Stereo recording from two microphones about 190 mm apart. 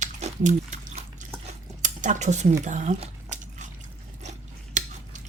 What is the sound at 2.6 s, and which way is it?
Squish, 40° right (ahead or behind).